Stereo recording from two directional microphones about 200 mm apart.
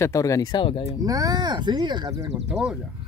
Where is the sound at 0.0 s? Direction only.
15° left (ahead or behind).